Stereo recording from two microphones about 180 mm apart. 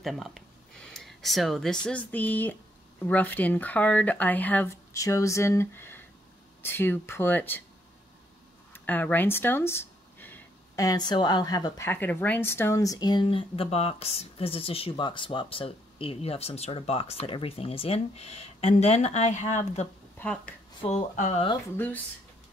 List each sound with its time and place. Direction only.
0.0 s speech: centre (ahead or behind)
8.7 s speech: 10° left (ahead or behind); by 19.9 s 40° left (ahead or behind)
20.2 s speech: 5° left (ahead or behind)
20.8 s speech: 40° left (ahead or behind)
21.7 s speech: 10° left (ahead or behind)